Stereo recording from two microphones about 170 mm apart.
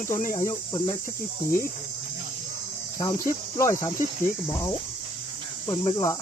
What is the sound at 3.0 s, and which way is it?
Speech, 20° left (ahead or behind).